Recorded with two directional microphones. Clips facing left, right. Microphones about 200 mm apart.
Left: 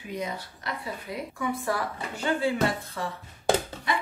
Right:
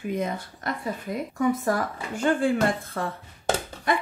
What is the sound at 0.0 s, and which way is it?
Speech, 50° right (ahead or behind).